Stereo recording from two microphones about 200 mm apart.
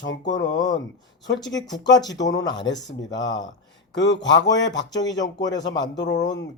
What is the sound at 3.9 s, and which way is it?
Speech, 65° left (ahead or behind).